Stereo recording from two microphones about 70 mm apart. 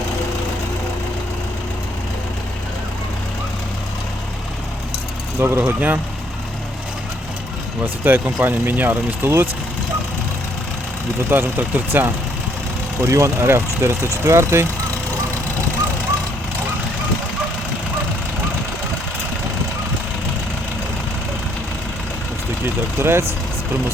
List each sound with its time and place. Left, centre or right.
5.4 s speech: right
5.6 s speech: right
7.8 s speech: right
11.3 s speech: right
13.0 s speech: right
22.6 s speech: right